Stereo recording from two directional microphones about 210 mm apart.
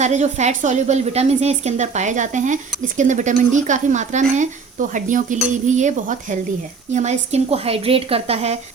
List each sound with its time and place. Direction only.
0.0 s a woman's voice: 35° right (ahead or behind)